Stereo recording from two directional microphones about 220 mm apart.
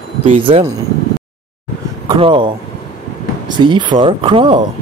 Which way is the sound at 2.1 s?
20° right (ahead or behind).